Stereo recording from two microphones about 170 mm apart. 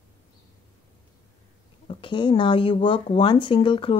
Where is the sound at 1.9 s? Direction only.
30° left (ahead or behind).